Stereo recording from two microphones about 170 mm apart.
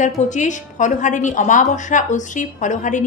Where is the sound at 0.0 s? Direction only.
45° left (ahead or behind).